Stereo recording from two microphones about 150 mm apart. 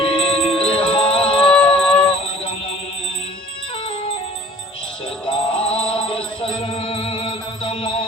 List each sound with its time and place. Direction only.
0.0 s music: 35° left (ahead or behind)
5.2 s music: 35° left (ahead or behind)